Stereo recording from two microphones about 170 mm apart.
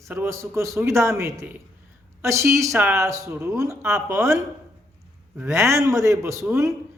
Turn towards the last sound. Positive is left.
turn(degrees=-15)  # may be behind; listen again after turning